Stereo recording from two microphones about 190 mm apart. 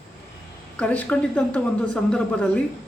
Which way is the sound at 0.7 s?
5° left (ahead or behind).